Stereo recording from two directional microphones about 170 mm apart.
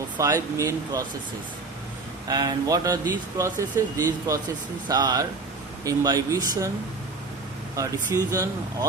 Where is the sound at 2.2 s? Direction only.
25° right (ahead or behind).